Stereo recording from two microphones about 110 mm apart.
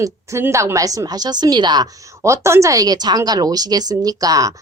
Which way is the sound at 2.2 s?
25° right (ahead or behind).